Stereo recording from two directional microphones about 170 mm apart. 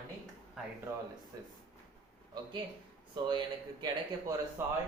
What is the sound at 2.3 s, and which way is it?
Speech, 30° right (ahead or behind).